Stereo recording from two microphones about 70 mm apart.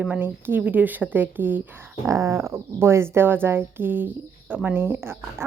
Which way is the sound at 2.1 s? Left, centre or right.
Right.